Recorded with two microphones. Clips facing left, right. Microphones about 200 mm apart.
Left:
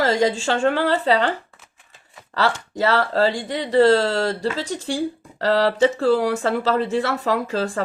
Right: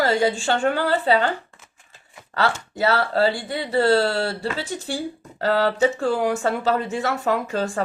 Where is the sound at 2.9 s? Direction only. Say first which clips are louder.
Left 1 dB; 35° left (ahead or behind).